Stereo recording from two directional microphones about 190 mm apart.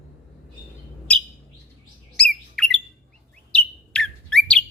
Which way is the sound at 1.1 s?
5° left (ahead or behind).